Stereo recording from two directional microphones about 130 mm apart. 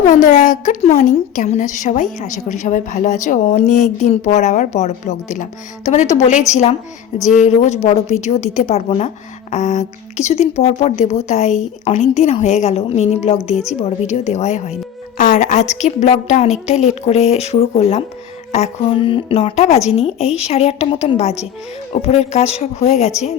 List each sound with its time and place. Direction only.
0.1 s a woman's voice: 75° left (ahead or behind)
0.8 s a woman's voice: 60° left (ahead or behind)
7.3 s a woman's voice: 70° left (ahead or behind)
7.9 s a woman's voice: 55° left (ahead or behind)